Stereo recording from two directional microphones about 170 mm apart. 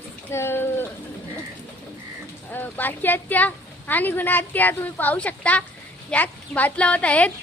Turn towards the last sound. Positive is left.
turn(degrees=10)  # may be behind; listen again after turning